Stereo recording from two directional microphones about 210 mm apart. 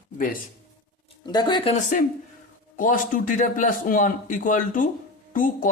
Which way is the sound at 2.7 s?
40° left (ahead or behind).